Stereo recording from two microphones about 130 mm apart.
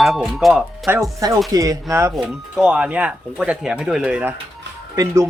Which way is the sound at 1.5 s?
30° right (ahead or behind).